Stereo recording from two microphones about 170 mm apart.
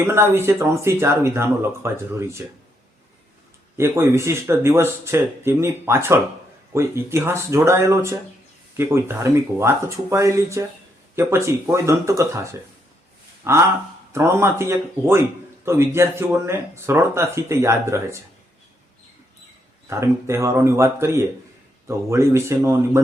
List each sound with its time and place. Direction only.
0.0 s a man's voice: 15° right (ahead or behind)
3.8 s a man's voice: 15° right (ahead or behind)
19.9 s a man's voice: 15° right (ahead or behind)